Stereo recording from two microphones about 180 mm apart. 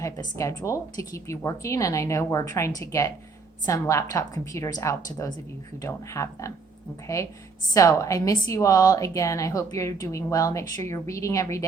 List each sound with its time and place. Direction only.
0.0 s a woman's voice: 15° left (ahead or behind)
7.7 s a woman's voice: 15° left (ahead or behind)